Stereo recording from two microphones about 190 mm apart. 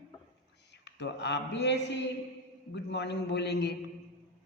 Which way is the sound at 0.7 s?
65° left (ahead or behind).